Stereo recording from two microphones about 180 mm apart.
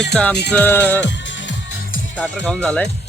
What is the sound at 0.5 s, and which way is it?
Music, 10° left (ahead or behind).